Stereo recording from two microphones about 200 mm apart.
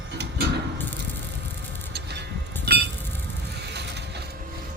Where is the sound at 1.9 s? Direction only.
55° right (ahead or behind).